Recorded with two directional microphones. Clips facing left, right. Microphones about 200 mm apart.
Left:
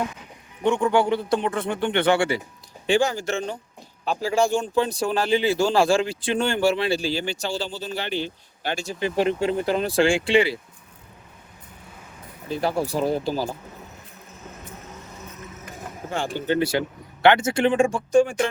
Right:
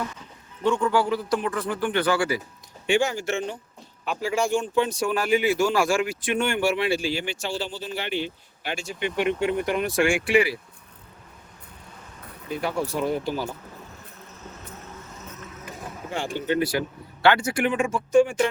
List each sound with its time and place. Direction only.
0.6 s a man's voice: 20° left (ahead or behind)
12.5 s speech: 35° left (ahead or behind)
16.5 s a man's voice: 25° left (ahead or behind)